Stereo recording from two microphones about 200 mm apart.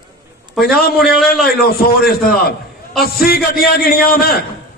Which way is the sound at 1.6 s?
50° left (ahead or behind).